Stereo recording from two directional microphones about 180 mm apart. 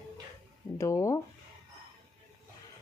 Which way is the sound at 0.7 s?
15° left (ahead or behind).